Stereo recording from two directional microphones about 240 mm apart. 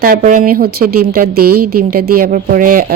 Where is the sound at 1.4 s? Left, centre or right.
Right.